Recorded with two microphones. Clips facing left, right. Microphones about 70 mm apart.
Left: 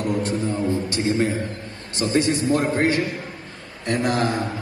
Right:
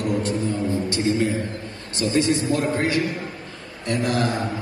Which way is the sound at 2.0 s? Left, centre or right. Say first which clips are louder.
Even; left.